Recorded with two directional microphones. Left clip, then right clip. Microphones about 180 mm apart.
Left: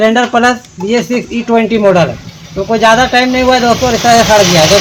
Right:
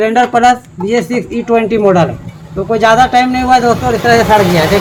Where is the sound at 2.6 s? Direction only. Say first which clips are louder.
Even; 40° left (ahead or behind).